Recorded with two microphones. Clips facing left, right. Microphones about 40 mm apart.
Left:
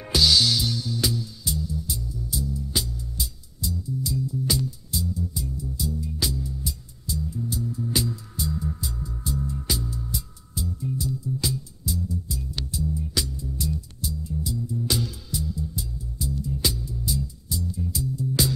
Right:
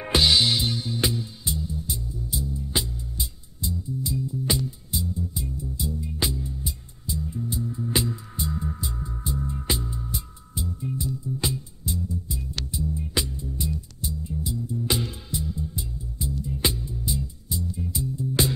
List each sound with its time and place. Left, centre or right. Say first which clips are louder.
0.0 s music: even; right